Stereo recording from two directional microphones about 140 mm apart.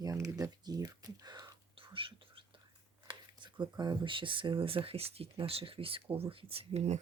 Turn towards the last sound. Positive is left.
turn(degrees=-50)  # may be behind; listen again after turning